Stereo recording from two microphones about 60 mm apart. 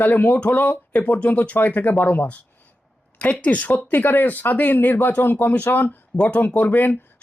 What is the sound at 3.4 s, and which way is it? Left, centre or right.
Speech, left.